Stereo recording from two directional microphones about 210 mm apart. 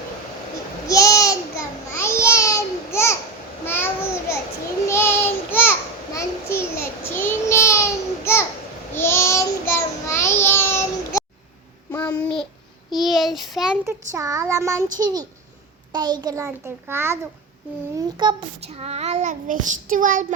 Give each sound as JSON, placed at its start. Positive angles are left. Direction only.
{"t": 0.9, "sound": "babbling", "side_deg": 15}
{"t": 4.3, "sound": "a sound", "side_deg": 15}
{"t": 4.9, "sound": "child singing", "side_deg": 10}
{"t": 11.9, "sound": "babbling", "side_deg": 5}
{"t": 12.9, "sound": "child singing", "side_deg": 0}
{"t": 13.8, "sound": "child singing", "side_deg": -15}
{"t": 15.9, "sound": "a child's voice", "side_deg": -20}
{"t": 17.9, "sound": "child singing", "side_deg": -20}